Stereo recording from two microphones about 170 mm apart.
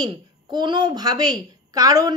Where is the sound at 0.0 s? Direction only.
25° right (ahead or behind).